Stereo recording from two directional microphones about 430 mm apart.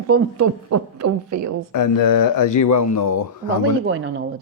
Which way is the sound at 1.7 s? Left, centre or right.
Left.